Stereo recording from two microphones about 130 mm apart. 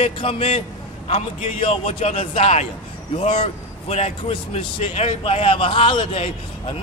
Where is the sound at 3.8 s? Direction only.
50° left (ahead or behind).